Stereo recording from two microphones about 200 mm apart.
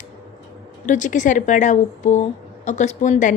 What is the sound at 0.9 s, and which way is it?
A woman's voice, 40° left (ahead or behind).